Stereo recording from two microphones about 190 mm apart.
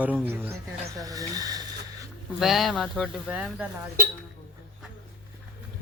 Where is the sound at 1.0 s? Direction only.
20° right (ahead or behind).